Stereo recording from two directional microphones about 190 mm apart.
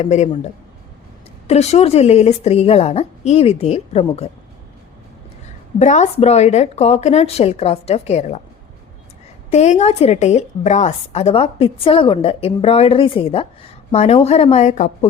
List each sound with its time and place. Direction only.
0.0 s a woman's voice: 35° left (ahead or behind)
1.5 s a woman's voice: 35° left (ahead or behind)
5.8 s a woman's voice: 40° left (ahead or behind)
9.5 s a woman's voice: 35° left (ahead or behind)